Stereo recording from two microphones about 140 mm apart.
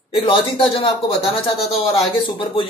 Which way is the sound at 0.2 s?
40° left (ahead or behind).